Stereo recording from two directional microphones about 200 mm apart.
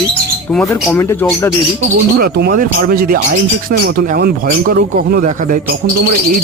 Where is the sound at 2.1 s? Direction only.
50° right (ahead or behind).